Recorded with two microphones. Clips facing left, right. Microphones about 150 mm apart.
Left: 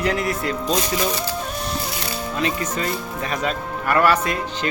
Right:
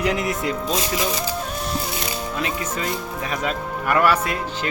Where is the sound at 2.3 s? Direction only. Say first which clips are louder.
Left 5 dB; 5° right (ahead or behind).